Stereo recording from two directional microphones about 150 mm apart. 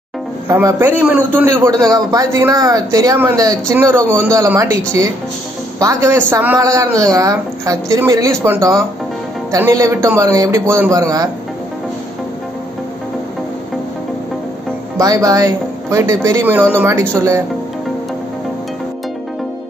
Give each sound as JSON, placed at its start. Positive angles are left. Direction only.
{"t": 0.5, "sound": "a man's voice", "side_deg": -15}
{"t": 3.9, "sound": "speech", "side_deg": 5}
{"t": 4.2, "sound": "a woman's voice", "side_deg": -15}
{"t": 5.8, "sound": "a woman's voice", "side_deg": -20}
{"t": 15.0, "sound": "a woman's voice", "side_deg": -20}